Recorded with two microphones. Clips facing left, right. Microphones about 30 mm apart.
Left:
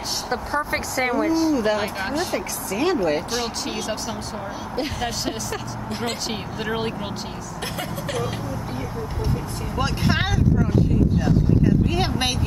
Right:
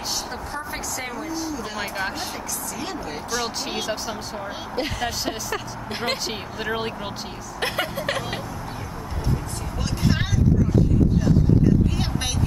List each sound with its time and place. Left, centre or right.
0.3 s speech: left
1.8 s speech: centre
2.7 s speech: left
3.7 s speech: centre
6.6 s speech: centre
7.6 s vehicle: right
9.8 s vehicle: left
11.9 s speech: left